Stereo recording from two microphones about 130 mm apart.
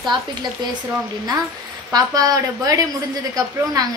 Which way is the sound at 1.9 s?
30° right (ahead or behind).